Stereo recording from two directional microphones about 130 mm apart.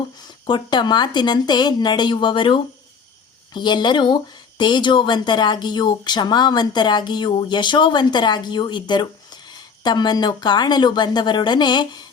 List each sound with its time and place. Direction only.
0.2 s speech: 35° left (ahead or behind)